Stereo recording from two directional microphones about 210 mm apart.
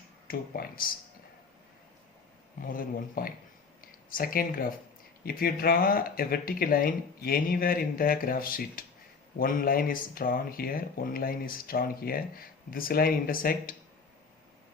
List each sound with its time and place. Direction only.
0.3 s speech: 45° left (ahead or behind)
2.6 s speech: 40° left (ahead or behind)